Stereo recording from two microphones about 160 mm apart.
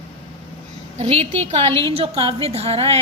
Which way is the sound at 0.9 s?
40° right (ahead or behind).